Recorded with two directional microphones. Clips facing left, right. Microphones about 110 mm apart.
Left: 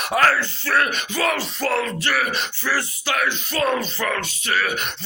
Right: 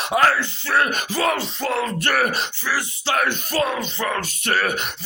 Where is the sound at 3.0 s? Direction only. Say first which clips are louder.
Right 4 dB; 35° right (ahead or behind).